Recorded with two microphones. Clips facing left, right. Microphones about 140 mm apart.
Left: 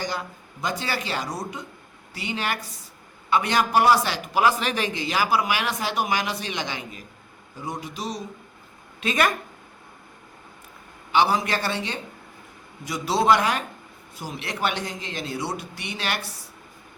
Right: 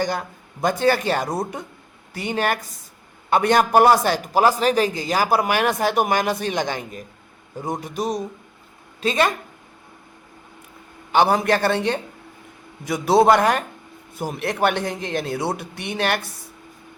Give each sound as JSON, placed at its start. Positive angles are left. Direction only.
{"t": 0.0, "sound": "a man's voice", "side_deg": -50}
{"t": 9.0, "sound": "speech", "side_deg": -30}
{"t": 11.1, "sound": "a man's voice", "side_deg": -50}